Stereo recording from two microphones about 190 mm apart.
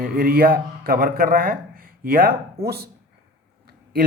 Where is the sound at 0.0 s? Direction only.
50° right (ahead or behind).